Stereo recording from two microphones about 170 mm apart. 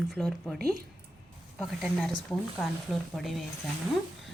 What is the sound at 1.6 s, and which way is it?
Speech, centre (ahead or behind).